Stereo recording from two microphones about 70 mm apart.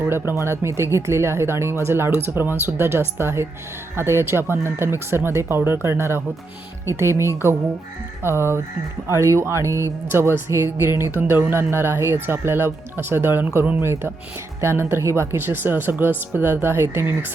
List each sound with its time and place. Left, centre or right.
0.0 s speech: right
11.2 s speech: right